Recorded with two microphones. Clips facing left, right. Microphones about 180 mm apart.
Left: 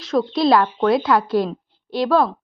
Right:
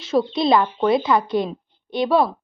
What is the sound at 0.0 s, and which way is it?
A woman's voice, centre (ahead or behind).